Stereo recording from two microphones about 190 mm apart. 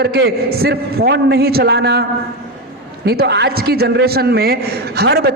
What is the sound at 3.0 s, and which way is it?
A woman's voice, 60° right (ahead or behind).